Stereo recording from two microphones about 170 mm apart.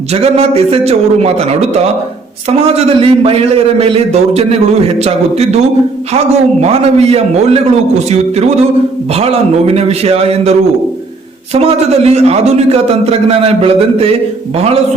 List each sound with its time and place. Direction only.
0.1 s a man's voice: 35° right (ahead or behind)
11.6 s a man's voice: 40° right (ahead or behind)